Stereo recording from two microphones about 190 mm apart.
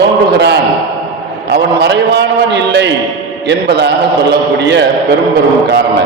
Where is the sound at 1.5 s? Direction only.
65° right (ahead or behind).